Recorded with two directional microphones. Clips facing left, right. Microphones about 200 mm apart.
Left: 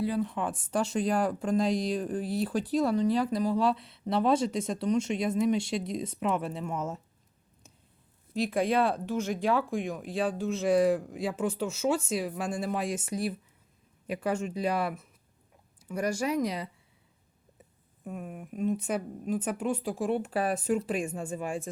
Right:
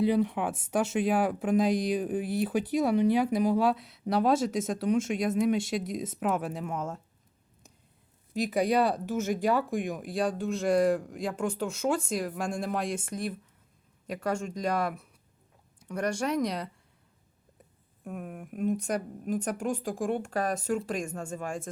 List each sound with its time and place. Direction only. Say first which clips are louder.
0.0 s speech: right 4 dB; 15° right (ahead or behind)
2.6 s speech: right 1 dB; 15° right (ahead or behind); by 7.0 s 5° left (ahead or behind)
8.4 s speech: right 1 dB; 5° right (ahead or behind)
18.0 s speech: even; centre (ahead or behind)